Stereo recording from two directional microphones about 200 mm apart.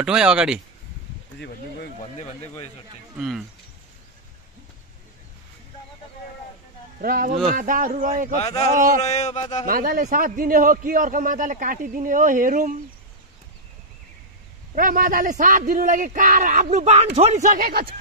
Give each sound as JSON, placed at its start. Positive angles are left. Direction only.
{"t": 0.0, "sound": "speech", "side_deg": -5}
{"t": 1.4, "sound": "speech", "side_deg": 55}
{"t": 3.2, "sound": "speech", "side_deg": -5}
{"t": 7.0, "sound": "speech", "side_deg": -45}
{"t": 8.4, "sound": "a sound", "side_deg": 30}
{"t": 8.7, "sound": "speech", "side_deg": -40}
{"t": 9.0, "sound": "a sound", "side_deg": 35}
{"t": 9.7, "sound": "speech", "side_deg": -45}
{"t": 14.8, "sound": "speech", "side_deg": -45}